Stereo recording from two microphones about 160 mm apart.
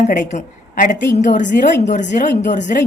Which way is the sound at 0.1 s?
50° left (ahead or behind).